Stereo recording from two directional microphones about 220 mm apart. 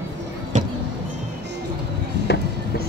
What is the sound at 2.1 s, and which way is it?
Chop, 50° right (ahead or behind).